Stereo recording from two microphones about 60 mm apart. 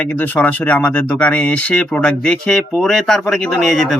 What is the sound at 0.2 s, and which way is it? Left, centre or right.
Speech, left.